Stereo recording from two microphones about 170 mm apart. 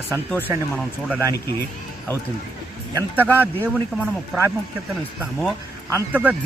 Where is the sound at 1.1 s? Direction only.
15° right (ahead or behind).